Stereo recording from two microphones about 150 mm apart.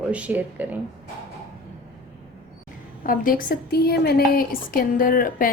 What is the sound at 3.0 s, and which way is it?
A woman's voice, 70° left (ahead or behind).